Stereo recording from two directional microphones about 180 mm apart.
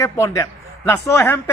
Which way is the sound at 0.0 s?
15° left (ahead or behind).